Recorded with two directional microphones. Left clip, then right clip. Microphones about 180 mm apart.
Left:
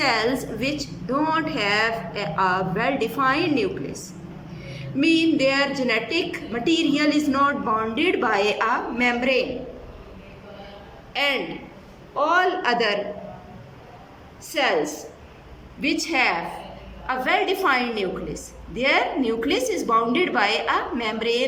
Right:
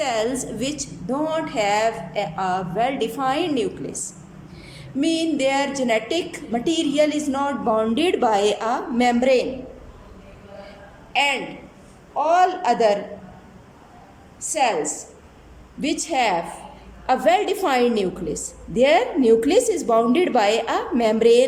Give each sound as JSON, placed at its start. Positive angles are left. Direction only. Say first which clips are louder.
{"t": 0.0, "sound": "a woman's voice", "louder": "left 1 dB", "side_deg": -15}
{"t": 4.9, "sound": "a woman's voice", "louder": "left 2 dB", "side_deg": -15}
{"t": 11.1, "sound": "a man's voice", "louder": "right 2 dB", "side_deg": -10}
{"t": 14.4, "sound": "a woman's voice", "louder": "right 1 dB", "side_deg": -15}
{"t": 15.8, "sound": "a woman's voice", "louder": "even", "side_deg": -20}